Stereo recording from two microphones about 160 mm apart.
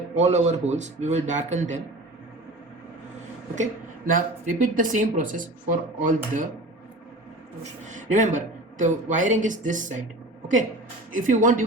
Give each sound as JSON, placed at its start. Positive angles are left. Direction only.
{"t": 0.2, "sound": "speech", "side_deg": -45}
{"t": 3.5, "sound": "speech", "side_deg": -55}
{"t": 7.6, "sound": "speech", "side_deg": -50}
{"t": 11.1, "sound": "speech", "side_deg": -55}